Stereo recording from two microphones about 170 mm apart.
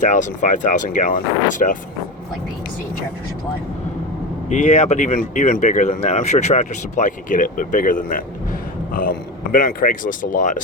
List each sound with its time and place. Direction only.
0.0 s speech: 50° left (ahead or behind)
4.4 s speech: 45° left (ahead or behind)